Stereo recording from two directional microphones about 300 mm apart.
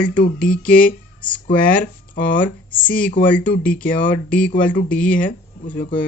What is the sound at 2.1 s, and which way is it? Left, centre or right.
Speech, left.